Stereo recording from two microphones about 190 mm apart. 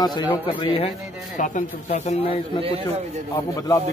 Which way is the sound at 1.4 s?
40° left (ahead or behind).